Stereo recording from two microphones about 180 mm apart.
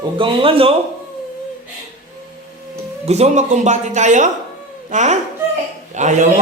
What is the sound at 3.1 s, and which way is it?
A man's voice, 40° right (ahead or behind).